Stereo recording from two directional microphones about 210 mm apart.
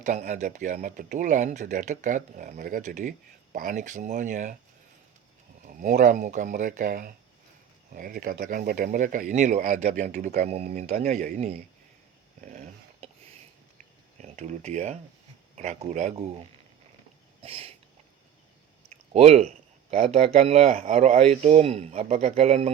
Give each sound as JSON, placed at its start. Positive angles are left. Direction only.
{"t": 0.0, "sound": "speech", "side_deg": -35}
{"t": 5.6, "sound": "speech", "side_deg": -35}
{"t": 12.4, "sound": "a sound", "side_deg": -35}
{"t": 14.2, "sound": "speech", "side_deg": -35}
{"t": 17.4, "sound": "a sound", "side_deg": -25}
{"t": 19.1, "sound": "speech", "side_deg": -30}